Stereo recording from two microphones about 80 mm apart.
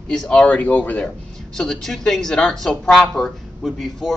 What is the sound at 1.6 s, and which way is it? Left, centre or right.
Speech, centre.